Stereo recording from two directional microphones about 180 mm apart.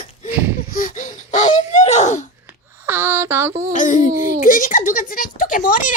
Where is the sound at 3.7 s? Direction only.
45° left (ahead or behind).